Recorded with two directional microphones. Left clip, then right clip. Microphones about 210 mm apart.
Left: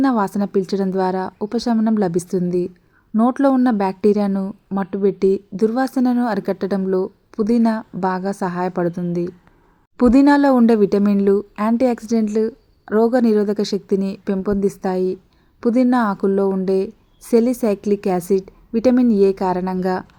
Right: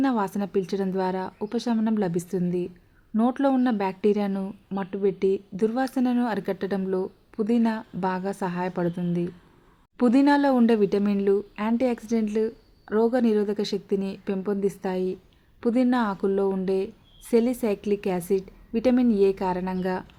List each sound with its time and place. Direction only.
0.0 s a woman's voice: 15° left (ahead or behind)